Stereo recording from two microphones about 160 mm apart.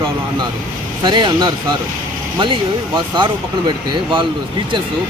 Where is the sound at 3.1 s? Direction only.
30° right (ahead or behind).